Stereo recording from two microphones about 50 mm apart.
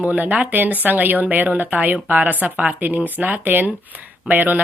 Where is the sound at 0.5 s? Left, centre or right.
Right.